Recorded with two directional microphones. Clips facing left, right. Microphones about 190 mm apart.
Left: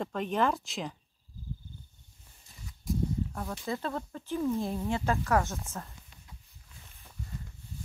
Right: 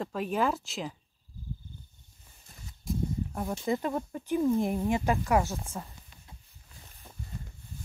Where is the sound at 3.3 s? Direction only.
20° right (ahead or behind).